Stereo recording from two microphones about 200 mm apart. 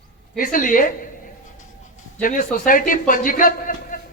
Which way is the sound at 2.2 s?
45° left (ahead or behind).